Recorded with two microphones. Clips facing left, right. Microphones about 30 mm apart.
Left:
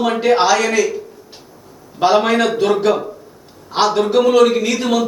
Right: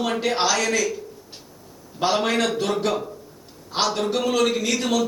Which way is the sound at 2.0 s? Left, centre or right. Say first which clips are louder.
Left 7 dB; centre.